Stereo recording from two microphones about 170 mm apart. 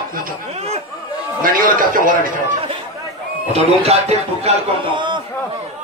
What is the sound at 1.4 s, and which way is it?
Speech, 55° right (ahead or behind).